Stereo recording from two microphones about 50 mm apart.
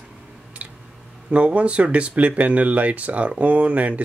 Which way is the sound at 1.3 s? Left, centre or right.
Right.